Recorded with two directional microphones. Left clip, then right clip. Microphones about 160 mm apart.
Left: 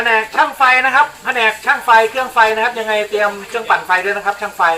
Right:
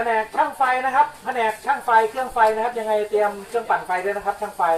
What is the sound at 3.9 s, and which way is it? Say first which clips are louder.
Speech: left 8 dB; 35° right (ahead or behind).